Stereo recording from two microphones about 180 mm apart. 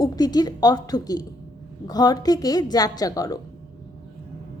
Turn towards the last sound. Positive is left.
turn(degrees=20)  # may be behind; listen again after turning